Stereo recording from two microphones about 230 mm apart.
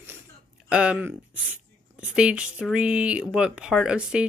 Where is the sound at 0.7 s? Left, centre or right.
Centre.